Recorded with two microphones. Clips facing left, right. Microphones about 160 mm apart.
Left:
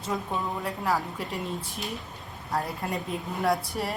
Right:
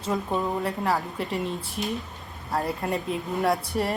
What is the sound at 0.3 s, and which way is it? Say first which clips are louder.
Speech: right 4 dB; 20° right (ahead or behind).